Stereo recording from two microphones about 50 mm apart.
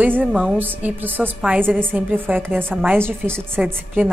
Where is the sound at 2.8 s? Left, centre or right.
Right.